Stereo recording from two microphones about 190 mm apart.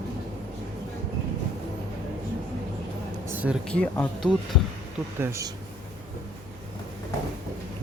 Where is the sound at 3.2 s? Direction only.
10° right (ahead or behind).